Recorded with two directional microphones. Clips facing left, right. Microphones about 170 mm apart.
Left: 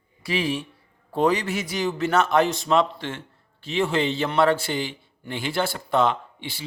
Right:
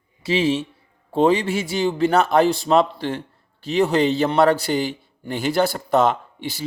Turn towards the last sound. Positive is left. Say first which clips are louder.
# right 4 dB
turn(degrees=-40)  # may be behind; listen again after turning